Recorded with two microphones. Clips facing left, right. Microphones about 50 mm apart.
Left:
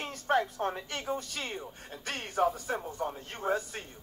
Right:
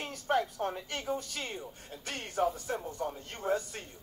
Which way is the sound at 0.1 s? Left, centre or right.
Left.